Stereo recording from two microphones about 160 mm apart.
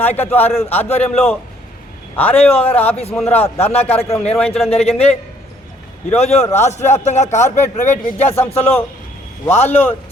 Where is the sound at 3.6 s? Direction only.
40° left (ahead or behind).